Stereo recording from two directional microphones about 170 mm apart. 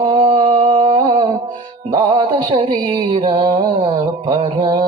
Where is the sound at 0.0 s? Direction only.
30° right (ahead or behind).